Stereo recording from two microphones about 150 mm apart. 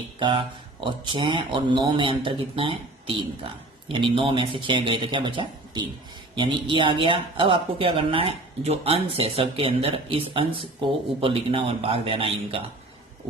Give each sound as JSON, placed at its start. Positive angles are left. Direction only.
{"t": 0.2, "sound": "speech", "side_deg": -35}